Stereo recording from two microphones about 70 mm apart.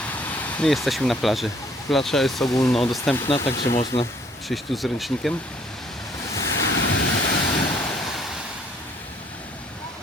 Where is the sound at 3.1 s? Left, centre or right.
Left.